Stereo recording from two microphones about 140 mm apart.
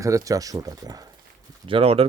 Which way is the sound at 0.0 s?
25° right (ahead or behind).